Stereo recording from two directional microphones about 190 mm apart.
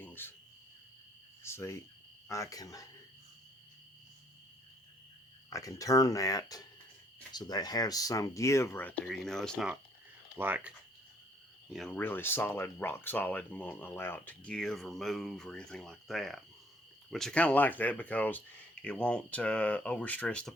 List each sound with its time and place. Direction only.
0.0 s cricket: 10° left (ahead or behind)
1.5 s speech: 15° left (ahead or behind)
5.5 s speech: 15° left (ahead or behind); by 9.7 s centre (ahead or behind)
10.3 s speech: 10° right (ahead or behind)
11.7 s speech: 5° left (ahead or behind)